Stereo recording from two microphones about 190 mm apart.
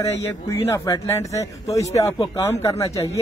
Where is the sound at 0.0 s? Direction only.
15° left (ahead or behind).